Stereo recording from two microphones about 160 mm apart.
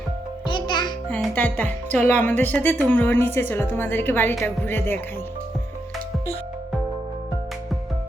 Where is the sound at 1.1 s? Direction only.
10° left (ahead or behind).